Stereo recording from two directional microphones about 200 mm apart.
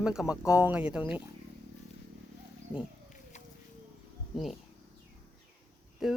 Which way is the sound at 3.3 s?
35° left (ahead or behind).